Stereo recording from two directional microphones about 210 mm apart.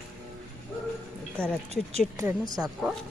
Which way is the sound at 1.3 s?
5° left (ahead or behind).